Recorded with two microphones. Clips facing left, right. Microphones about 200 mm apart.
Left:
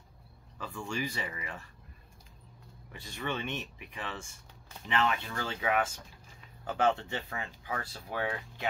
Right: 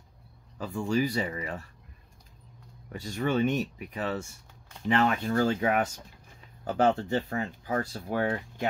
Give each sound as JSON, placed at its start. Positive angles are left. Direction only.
{"t": 0.6, "sound": "speech", "side_deg": -35}
{"t": 2.9, "sound": "speech", "side_deg": -40}